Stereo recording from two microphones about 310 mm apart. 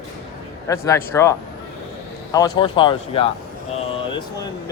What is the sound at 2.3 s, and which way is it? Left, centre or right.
Speech, centre.